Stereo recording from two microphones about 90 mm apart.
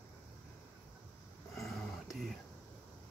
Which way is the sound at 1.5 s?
Centre (ahead or behind).